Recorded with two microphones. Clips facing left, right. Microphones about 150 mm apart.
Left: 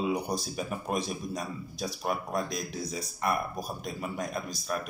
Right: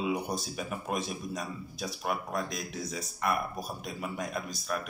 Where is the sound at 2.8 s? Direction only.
35° left (ahead or behind).